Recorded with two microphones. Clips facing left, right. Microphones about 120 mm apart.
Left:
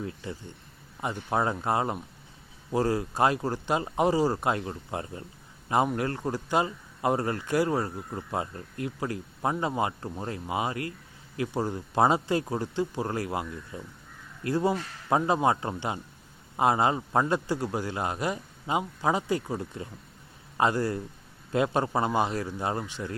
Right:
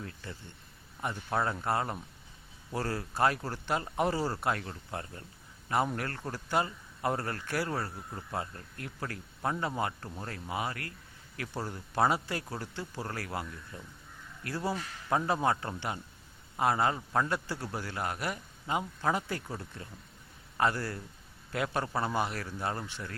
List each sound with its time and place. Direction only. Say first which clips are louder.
0.0 s speech: left 8 dB; 20° left (ahead or behind)